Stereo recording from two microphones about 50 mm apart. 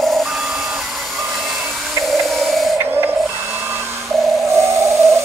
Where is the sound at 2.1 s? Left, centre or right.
Centre.